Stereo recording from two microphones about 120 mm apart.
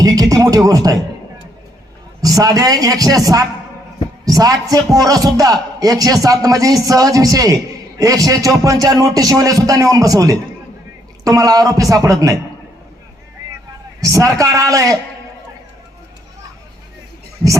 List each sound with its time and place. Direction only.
0.0 s speech: 30° right (ahead or behind)
2.2 s a man's voice: 30° right (ahead or behind)
14.0 s a man's voice: 25° right (ahead or behind)